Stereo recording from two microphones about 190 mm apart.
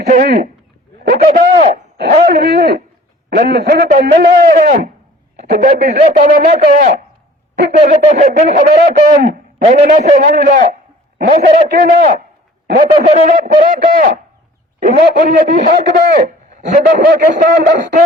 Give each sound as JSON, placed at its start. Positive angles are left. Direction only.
{"t": 0.1, "sound": "a man's voice", "side_deg": -50}
{"t": 2.2, "sound": "a man's voice", "side_deg": -55}
{"t": 8.0, "sound": "a man's voice", "side_deg": -40}
{"t": 15.9, "sound": "speech", "side_deg": -55}
{"t": 16.6, "sound": "a man's voice", "side_deg": -40}